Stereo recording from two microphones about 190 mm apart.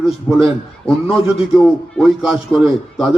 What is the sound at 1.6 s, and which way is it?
A man's voice, centre (ahead or behind).